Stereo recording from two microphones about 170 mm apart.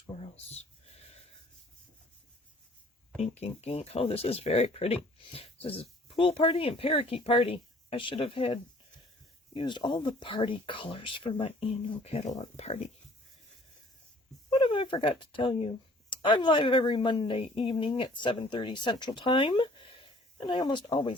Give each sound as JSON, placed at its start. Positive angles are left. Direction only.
{"t": 0.2, "sound": "a sound", "side_deg": 35}
{"t": 3.2, "sound": "speech", "side_deg": 40}
{"t": 9.6, "sound": "speech", "side_deg": 25}
{"t": 14.5, "sound": "speech", "side_deg": 30}